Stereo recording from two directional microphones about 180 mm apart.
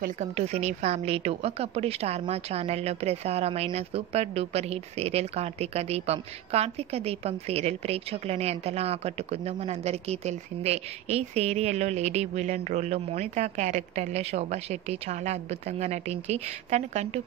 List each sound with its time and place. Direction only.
0.0 s speech: 40° right (ahead or behind)